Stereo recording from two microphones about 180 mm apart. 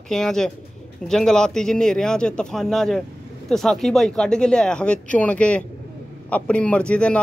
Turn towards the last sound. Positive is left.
turn(degrees=5)  # may be behind; listen again after turning